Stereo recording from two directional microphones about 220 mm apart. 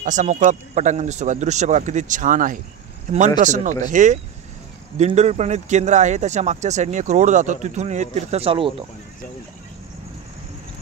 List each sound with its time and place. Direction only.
0.0 s speech: 35° right (ahead or behind)